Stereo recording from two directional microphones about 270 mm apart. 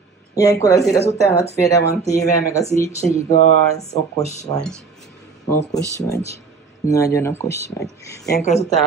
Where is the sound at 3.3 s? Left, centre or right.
Left.